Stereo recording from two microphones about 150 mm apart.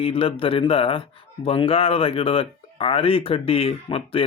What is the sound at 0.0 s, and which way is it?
Speech, 35° left (ahead or behind).